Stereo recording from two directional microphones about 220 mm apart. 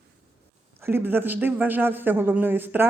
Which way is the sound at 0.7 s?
10° right (ahead or behind).